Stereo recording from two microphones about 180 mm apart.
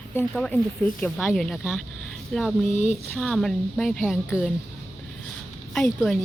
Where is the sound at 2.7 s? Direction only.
40° left (ahead or behind).